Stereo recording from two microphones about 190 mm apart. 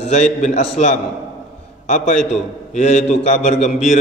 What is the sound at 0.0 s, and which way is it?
A man's voice, 35° left (ahead or behind).